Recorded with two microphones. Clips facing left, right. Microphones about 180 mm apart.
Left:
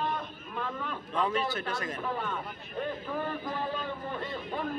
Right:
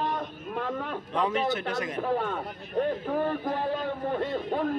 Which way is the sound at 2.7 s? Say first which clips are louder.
Right 7 dB; 60° right (ahead or behind).